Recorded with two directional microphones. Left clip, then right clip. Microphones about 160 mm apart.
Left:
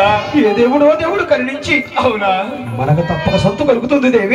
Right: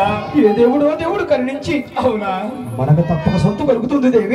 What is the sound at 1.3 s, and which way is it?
Speech, 20° right (ahead or behind).